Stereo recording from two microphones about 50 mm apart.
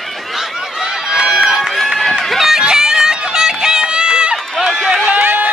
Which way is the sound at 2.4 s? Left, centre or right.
Centre.